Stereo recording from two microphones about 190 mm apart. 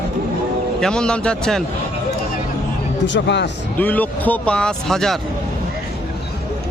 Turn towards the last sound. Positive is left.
turn(degrees=0)  # may be behind; listen again after turning